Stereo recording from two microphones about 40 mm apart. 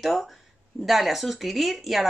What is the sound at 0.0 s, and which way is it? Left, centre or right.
Speech, centre.